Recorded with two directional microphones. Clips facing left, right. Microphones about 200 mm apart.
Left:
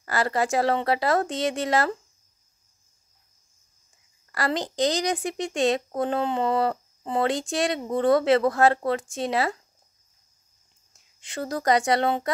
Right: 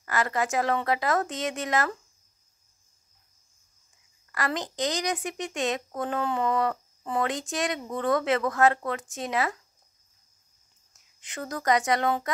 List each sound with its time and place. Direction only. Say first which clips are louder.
0.0 s a woman's voice: left 3 dB; 30° left (ahead or behind)
4.3 s a woman's voice: left 3 dB; 30° left (ahead or behind)
11.1 s a woman's voice: left 5 dB; 30° left (ahead or behind)